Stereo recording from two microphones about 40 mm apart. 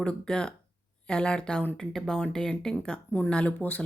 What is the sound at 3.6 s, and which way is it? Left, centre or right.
Speech, left.